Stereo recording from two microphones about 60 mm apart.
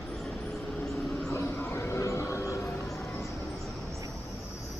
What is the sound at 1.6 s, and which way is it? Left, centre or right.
Vehicle, left.